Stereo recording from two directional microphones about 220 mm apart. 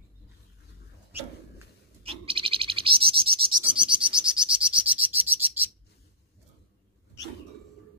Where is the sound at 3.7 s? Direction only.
5° right (ahead or behind).